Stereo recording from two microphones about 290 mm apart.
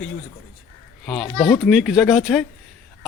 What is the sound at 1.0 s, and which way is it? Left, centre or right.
A child's voice, centre.